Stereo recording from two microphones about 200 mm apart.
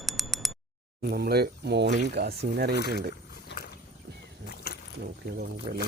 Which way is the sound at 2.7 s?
55° left (ahead or behind).